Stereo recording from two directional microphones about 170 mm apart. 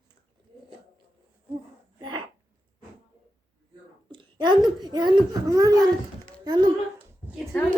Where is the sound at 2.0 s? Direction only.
25° right (ahead or behind).